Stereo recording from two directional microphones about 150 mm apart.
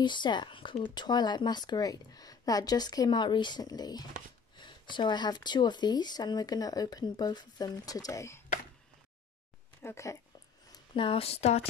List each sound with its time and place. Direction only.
0.0 s speech: 30° left (ahead or behind)
9.8 s speech: 20° left (ahead or behind)
10.7 s speech: 35° left (ahead or behind)